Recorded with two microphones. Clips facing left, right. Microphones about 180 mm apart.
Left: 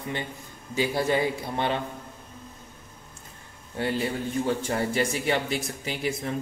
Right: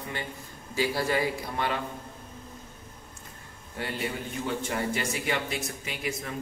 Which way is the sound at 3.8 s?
25° left (ahead or behind).